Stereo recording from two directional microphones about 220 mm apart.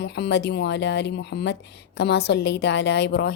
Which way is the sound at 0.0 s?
50° left (ahead or behind).